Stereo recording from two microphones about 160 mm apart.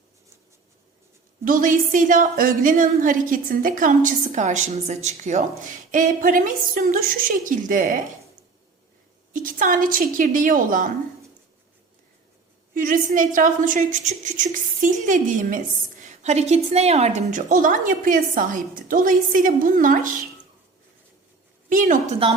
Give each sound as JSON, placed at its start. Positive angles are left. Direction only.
{"t": 1.5, "sound": "a woman's voice", "side_deg": -55}
{"t": 9.3, "sound": "a woman's voice", "side_deg": -55}
{"t": 12.7, "sound": "a woman's voice", "side_deg": -60}
{"t": 21.7, "sound": "a woman's voice", "side_deg": -55}
{"t": 22.2, "sound": "a woman's voice", "side_deg": -35}